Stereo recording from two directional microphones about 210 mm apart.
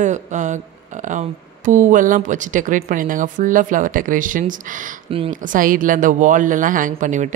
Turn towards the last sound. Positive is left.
turn(degrees=-35)  # may be behind; listen again after turning